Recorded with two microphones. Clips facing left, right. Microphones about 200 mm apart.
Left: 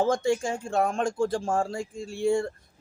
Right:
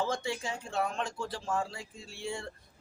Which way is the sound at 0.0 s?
50° left (ahead or behind).